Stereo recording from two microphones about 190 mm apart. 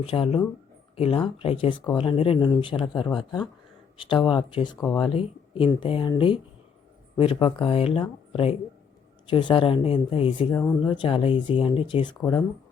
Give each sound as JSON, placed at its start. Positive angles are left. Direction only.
{"t": 0.0, "sound": "speech", "side_deg": 30}
{"t": 10.5, "sound": "speech", "side_deg": 15}